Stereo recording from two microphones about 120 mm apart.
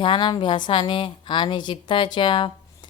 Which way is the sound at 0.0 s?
40° left (ahead or behind).